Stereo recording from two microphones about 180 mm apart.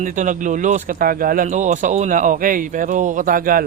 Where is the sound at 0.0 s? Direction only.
45° right (ahead or behind).